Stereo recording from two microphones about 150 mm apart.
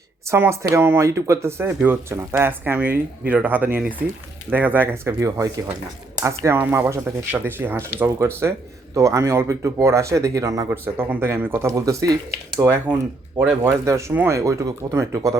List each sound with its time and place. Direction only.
0.3 s speech: 15° right (ahead or behind)